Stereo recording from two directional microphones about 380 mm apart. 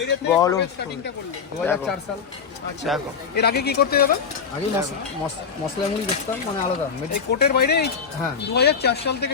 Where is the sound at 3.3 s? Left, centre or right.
Left.